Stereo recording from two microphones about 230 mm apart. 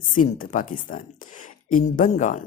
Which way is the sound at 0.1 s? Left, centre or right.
Left.